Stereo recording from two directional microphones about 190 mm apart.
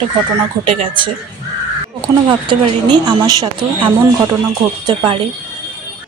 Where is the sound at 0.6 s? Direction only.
25° right (ahead or behind).